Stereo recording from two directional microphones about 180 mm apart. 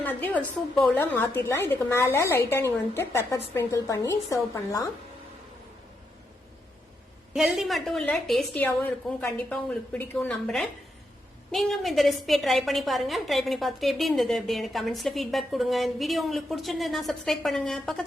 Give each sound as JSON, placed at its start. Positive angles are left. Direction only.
{"t": 0.0, "sound": "a woman's voice", "side_deg": 10}
{"t": 7.3, "sound": "a woman's voice", "side_deg": 0}